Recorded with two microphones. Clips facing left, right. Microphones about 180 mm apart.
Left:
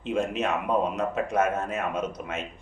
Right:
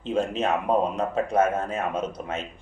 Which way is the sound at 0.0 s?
30° right (ahead or behind).